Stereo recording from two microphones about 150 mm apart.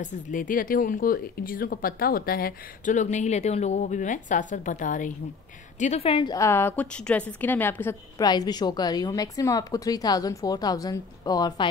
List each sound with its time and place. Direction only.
0.0 s speech: 60° left (ahead or behind)
5.8 s a woman's voice: 45° left (ahead or behind)
6.3 s a woman's voice: 20° left (ahead or behind)
8.2 s a woman's voice: 25° left (ahead or behind)